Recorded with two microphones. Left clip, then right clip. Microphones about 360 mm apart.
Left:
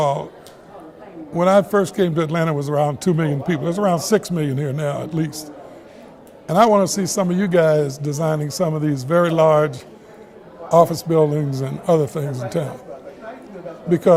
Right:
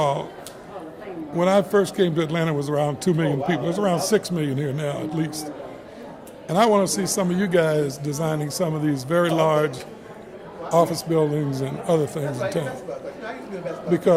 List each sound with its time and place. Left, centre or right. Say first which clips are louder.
0.0 s a man's voice: left 3 dB; left
1.4 s a man's voice: left 4 dB; left
6.5 s a man's voice: left 4 dB; left
13.9 s speech: left 5 dB; left